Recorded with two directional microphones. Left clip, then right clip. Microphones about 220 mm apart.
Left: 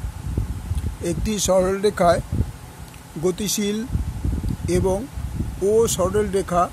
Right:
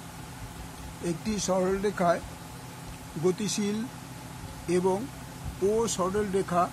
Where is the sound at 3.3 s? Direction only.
35° left (ahead or behind).